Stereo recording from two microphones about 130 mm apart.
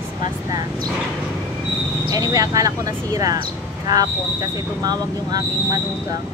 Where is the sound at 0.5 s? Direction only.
30° right (ahead or behind).